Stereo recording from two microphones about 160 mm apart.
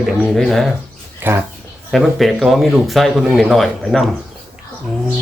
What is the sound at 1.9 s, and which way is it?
Speech, centre (ahead or behind).